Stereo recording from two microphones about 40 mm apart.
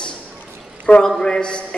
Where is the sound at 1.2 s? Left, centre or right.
Left.